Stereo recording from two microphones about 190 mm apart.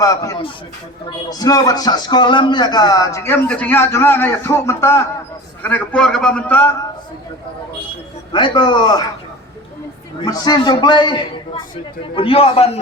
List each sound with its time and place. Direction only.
0.0 s speech: 15° left (ahead or behind)
8.3 s a man's voice: 25° left (ahead or behind)
10.2 s a man's voice: 20° left (ahead or behind)